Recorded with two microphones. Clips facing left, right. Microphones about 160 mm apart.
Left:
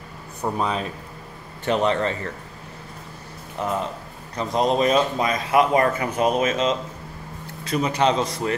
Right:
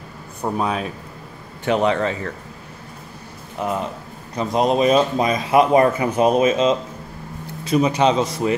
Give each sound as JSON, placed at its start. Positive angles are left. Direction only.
{"t": 0.4, "sound": "speech", "side_deg": -5}
{"t": 3.6, "sound": "speech", "side_deg": -10}